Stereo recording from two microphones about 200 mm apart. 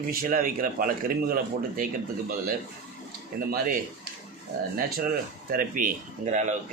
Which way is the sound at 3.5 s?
45° right (ahead or behind).